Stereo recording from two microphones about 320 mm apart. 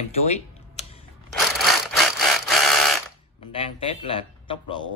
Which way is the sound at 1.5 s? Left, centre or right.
Centre.